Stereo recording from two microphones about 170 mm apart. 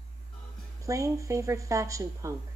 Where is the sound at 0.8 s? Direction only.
20° right (ahead or behind).